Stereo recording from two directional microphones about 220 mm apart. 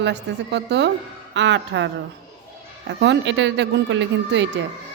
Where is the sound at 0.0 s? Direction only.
50° right (ahead or behind).